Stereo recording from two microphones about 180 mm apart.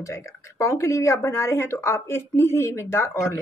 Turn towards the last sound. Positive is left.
turn(degrees=15)  # may be behind; listen again after turning